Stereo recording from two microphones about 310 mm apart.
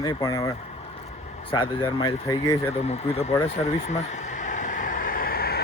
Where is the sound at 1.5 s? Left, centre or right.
Centre.